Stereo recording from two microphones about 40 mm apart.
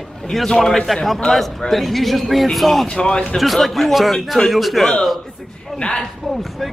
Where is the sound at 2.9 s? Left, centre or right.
Left.